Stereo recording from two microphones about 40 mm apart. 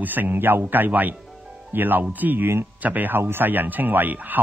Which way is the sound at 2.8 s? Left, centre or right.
Right.